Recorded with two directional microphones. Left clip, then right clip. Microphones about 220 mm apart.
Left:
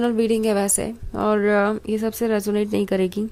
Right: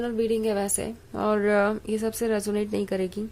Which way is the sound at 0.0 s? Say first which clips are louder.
Left 5 dB; 25° left (ahead or behind).